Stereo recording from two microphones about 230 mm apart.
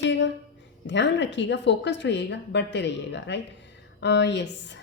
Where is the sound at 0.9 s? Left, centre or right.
Left.